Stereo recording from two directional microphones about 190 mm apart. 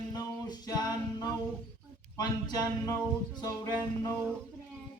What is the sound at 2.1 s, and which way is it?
Speech, 20° left (ahead or behind).